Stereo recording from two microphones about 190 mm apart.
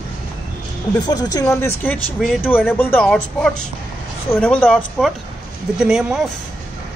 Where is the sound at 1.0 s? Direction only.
20° left (ahead or behind); by 2.7 s 5° right (ahead or behind).